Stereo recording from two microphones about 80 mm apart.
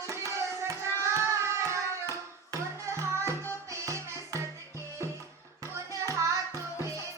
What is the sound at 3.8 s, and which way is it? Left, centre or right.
Music, right.